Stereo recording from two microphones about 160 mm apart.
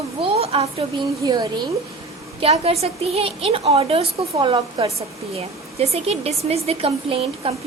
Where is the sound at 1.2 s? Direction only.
25° right (ahead or behind).